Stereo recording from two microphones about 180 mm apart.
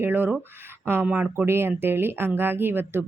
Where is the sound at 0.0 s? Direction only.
10° right (ahead or behind).